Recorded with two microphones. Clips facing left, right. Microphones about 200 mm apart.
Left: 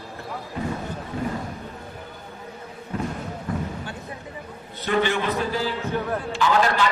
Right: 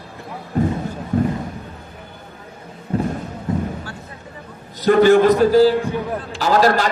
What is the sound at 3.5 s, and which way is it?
Basketball bounce, 25° right (ahead or behind).